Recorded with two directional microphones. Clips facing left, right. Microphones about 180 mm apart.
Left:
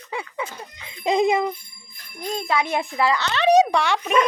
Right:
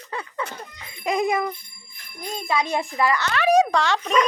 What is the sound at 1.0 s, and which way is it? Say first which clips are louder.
Speech: left 3 dB; 25° left (ahead or behind).